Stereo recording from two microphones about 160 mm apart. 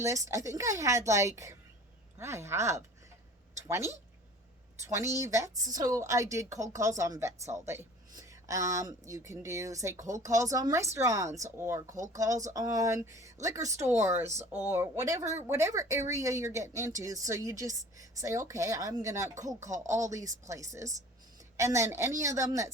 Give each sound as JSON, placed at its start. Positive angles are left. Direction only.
{"t": 0.0, "sound": "speech", "side_deg": -20}